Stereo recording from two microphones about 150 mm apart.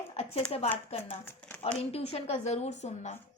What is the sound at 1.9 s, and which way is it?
A woman's voice, 40° left (ahead or behind).